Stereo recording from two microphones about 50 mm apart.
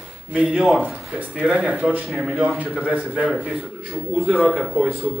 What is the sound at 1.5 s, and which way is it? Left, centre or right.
Speech, right.